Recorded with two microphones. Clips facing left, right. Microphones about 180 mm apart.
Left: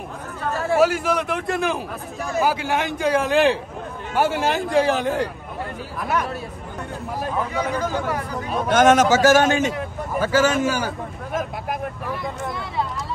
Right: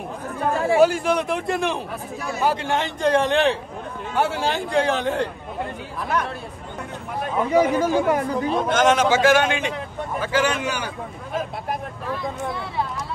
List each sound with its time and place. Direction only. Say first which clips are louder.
0.7 s a man's voice: even; centre (ahead or behind)
7.5 s speech: right 6 dB; 20° right (ahead or behind)
8.7 s a man's voice: left 4 dB; 50° left (ahead or behind)
12.1 s a man's voice: right 4 dB; centre (ahead or behind)